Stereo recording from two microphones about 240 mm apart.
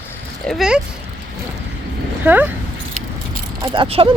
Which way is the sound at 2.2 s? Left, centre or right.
Centre.